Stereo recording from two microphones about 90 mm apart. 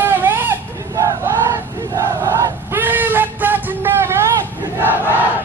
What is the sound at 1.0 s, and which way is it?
Battle cry, 35° right (ahead or behind).